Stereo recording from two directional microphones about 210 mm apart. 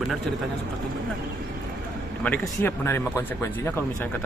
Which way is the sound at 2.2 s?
5° left (ahead or behind).